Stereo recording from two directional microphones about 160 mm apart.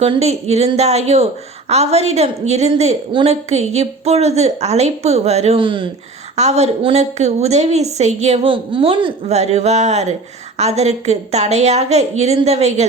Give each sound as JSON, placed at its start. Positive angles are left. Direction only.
{"t": 0.0, "sound": "a woman's voice", "side_deg": -40}
{"t": 6.3, "sound": "a woman's voice", "side_deg": -45}